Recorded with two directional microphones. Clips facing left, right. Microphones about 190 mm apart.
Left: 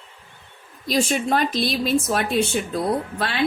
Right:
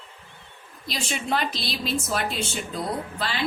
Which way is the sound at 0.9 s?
45° left (ahead or behind).